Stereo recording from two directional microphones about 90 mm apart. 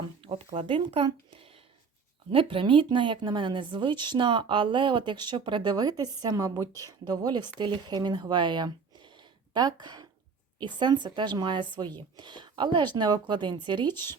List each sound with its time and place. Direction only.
0.2 s a woman's voice: 90° right; by 13.6 s 55° right (ahead or behind)
13.8 s speech: 25° left (ahead or behind)